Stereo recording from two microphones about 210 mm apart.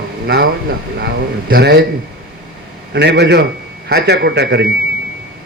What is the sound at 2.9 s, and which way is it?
A man's voice, 55° right (ahead or behind).